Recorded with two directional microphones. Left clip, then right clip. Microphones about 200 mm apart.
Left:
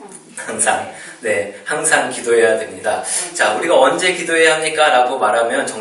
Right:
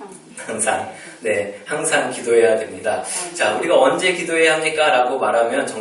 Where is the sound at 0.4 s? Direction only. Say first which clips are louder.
Left 3 dB; 10° right (ahead or behind).